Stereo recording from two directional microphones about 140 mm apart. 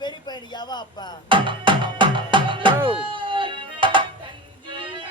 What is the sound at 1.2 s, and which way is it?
Music, 35° right (ahead or behind).